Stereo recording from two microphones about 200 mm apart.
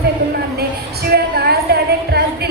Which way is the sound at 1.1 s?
55° right (ahead or behind).